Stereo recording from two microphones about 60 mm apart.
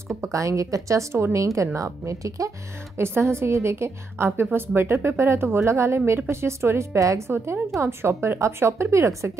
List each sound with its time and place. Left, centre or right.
0.2 s speech: right
3.0 s a woman's voice: right
7.0 s speech: right
7.8 s a woman's voice: right